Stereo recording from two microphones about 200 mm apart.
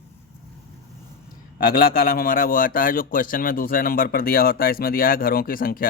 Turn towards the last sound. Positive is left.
turn(degrees=45)  # may be behind; listen again after turning